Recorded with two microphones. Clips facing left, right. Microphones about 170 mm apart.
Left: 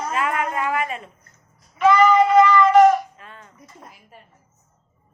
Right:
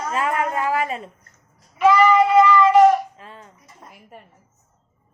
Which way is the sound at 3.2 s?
35° right (ahead or behind).